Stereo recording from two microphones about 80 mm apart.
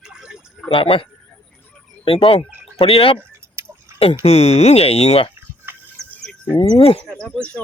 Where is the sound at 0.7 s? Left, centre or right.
Left.